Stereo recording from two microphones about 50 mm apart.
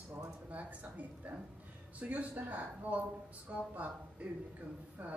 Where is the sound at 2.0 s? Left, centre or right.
Right.